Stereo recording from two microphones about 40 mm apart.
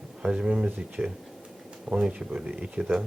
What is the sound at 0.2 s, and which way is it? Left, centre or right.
Speech, right.